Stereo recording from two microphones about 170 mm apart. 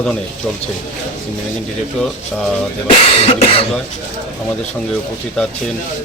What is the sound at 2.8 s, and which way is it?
Speech, 35° left (ahead or behind).